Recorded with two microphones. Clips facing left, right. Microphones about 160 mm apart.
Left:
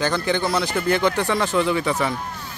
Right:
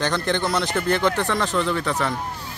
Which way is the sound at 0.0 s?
5° left (ahead or behind).